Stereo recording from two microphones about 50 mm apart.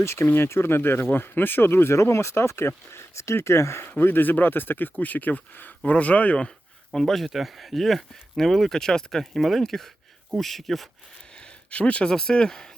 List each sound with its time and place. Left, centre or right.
0.0 s speech: left
2.0 s speech: left
3.8 s speech: left
7.0 s speech: centre
11.3 s speech: left